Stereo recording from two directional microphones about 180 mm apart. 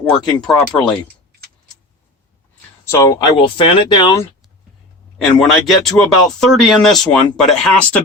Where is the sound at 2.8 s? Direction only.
20° left (ahead or behind).